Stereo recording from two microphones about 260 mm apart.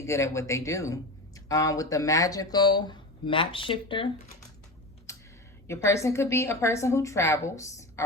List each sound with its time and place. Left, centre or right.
0.0 s speech: centre
5.6 s speech: centre